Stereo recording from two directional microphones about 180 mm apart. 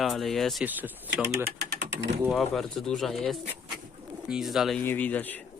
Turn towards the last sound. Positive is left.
turn(degrees=10)  # may be behind; listen again after turning